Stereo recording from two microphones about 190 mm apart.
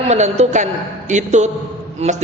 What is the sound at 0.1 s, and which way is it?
A man's voice, 35° right (ahead or behind).